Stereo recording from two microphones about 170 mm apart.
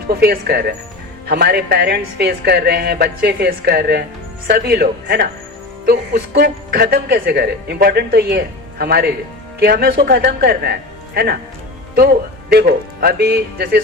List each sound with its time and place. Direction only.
0.1 s speech: 65° right (ahead or behind)